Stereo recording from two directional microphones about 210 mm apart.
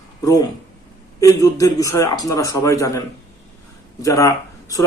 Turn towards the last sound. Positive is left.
turn(degrees=15)  # may be behind; listen again after turning